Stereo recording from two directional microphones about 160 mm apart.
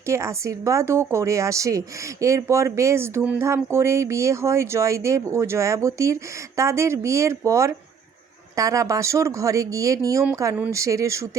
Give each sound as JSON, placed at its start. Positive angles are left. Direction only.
{"t": 0.0, "sound": "a woman's voice", "side_deg": -20}